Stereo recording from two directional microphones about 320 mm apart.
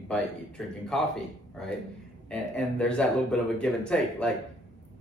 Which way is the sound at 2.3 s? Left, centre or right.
Centre.